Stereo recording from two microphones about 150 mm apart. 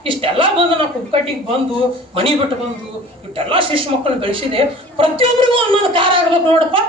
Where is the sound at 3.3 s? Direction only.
35° right (ahead or behind).